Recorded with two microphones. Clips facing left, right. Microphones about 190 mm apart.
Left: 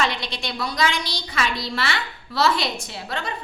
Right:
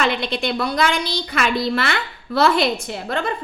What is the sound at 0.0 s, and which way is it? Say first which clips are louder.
A woman's voice: right 5 dB; 55° right (ahead or behind).